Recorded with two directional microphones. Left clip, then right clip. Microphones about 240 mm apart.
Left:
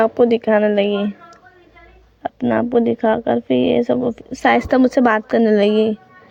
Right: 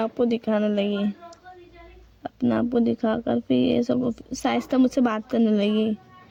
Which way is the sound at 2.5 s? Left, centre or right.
Centre.